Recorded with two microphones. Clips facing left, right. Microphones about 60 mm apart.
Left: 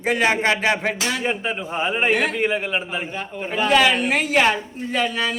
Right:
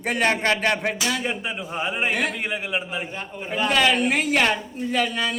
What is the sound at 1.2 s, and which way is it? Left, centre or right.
Speech, left.